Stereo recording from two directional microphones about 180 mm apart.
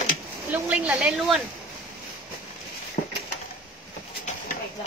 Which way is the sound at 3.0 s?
55° left (ahead or behind).